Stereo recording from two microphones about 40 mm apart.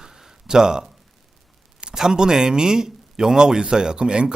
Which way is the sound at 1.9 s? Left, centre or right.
Centre.